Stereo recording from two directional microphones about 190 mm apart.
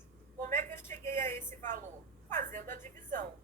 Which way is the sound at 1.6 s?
45° right (ahead or behind).